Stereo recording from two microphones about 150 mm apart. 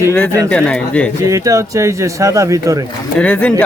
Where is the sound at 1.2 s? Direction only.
20° right (ahead or behind).